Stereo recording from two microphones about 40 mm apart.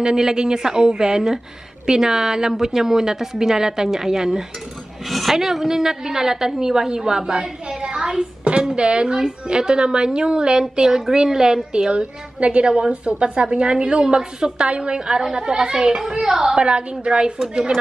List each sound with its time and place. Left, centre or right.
0.0 s a woman's voice: centre
5.0 s a woman's voice: centre; by 17.3 s right